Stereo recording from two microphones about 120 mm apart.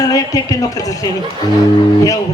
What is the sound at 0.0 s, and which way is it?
A man's voice, 30° left (ahead or behind).